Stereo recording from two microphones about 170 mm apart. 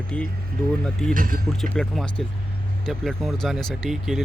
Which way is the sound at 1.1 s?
55° right (ahead or behind).